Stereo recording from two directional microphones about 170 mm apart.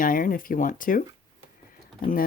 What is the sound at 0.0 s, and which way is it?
Speech, 55° left (ahead or behind).